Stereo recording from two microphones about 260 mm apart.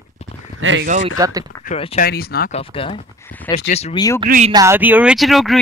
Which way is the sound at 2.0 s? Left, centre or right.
Left.